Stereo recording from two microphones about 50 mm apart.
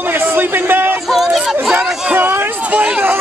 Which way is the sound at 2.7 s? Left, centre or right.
Centre.